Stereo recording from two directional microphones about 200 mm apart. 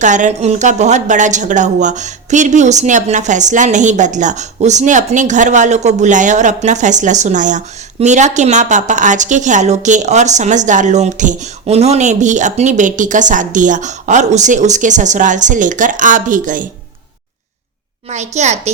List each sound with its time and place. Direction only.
0.0 s a woman's voice: 40° right (ahead or behind)
18.1 s a woman's voice: 35° right (ahead or behind)